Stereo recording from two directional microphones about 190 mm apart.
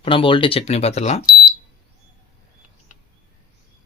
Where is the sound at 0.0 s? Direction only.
30° left (ahead or behind).